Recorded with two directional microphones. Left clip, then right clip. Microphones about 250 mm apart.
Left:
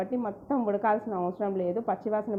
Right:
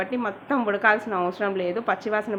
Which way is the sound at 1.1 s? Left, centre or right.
Centre.